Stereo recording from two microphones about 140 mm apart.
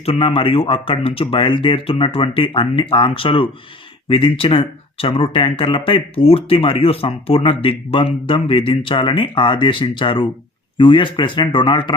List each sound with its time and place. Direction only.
0.0 s speech: 40° left (ahead or behind)